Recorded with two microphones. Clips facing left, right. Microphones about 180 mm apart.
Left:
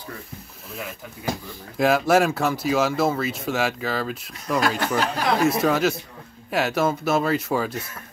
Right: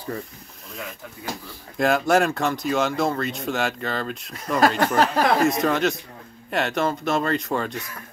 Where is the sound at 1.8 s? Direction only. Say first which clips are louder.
Left 1 dB; centre (ahead or behind).